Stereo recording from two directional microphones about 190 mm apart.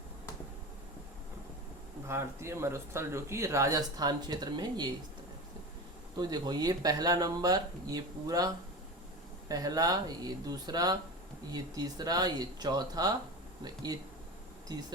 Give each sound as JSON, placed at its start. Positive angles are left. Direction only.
{"t": 2.0, "sound": "speech", "side_deg": -15}
{"t": 6.1, "sound": "speech", "side_deg": -20}
{"t": 14.7, "sound": "speech", "side_deg": -20}